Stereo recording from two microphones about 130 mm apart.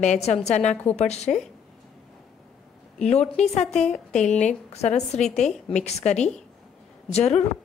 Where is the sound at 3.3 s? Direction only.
60° left (ahead or behind).